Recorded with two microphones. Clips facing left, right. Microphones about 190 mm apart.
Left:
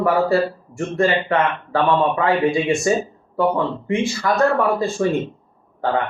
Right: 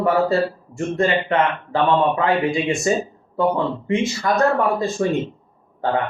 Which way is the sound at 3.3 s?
20° right (ahead or behind).